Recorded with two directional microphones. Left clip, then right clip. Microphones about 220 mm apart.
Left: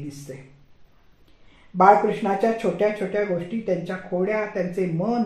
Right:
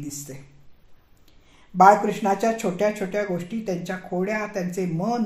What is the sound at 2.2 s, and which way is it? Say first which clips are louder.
Speech: even; 35° right (ahead or behind).